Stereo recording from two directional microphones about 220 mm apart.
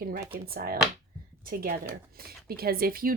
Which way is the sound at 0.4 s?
45° right (ahead or behind).